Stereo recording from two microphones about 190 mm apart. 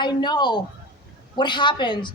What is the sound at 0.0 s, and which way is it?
A woman's voice, 25° left (ahead or behind).